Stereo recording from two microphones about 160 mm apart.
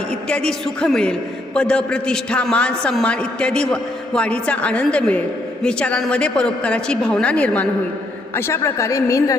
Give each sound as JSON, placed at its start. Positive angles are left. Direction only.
{"t": 0.3, "sound": "a man's voice", "side_deg": 5}